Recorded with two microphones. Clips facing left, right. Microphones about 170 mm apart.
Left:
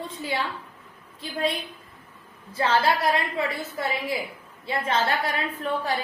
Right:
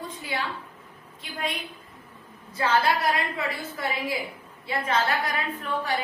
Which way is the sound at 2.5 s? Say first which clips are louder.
Left 1 dB; 25° left (ahead or behind).